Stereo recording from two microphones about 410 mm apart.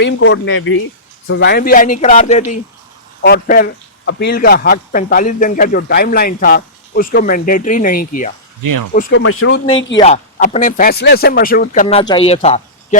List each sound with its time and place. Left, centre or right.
0.0 s a man's voice: left
10.0 s a man's voice: centre